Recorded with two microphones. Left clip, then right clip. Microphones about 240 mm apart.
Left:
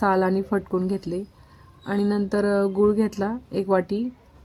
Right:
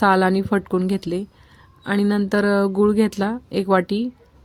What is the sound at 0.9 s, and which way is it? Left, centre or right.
Speech, right.